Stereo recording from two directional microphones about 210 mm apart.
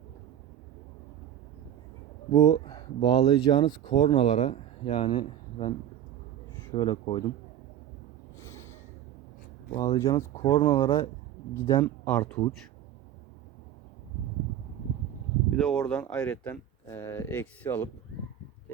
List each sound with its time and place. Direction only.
2.3 s speech: 20° left (ahead or behind)
6.7 s speech: 15° left (ahead or behind)
8.4 s snort: 10° left (ahead or behind)
9.9 s speech: 20° left (ahead or behind)
15.4 s a sound: centre (ahead or behind)
15.8 s speech: 5° left (ahead or behind)